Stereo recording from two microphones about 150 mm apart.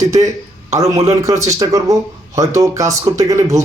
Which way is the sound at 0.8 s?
20° right (ahead or behind).